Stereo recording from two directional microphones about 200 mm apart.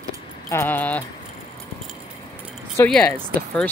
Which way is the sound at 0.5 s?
10° left (ahead or behind).